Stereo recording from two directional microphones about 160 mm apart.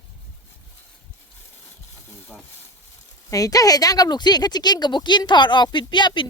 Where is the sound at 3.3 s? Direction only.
20° left (ahead or behind).